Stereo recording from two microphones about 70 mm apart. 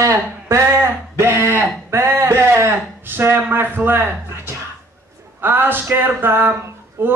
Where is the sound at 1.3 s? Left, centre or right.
Right.